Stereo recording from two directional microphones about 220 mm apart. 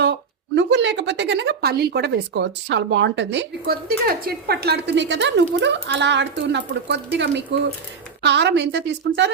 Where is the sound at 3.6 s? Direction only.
40° right (ahead or behind).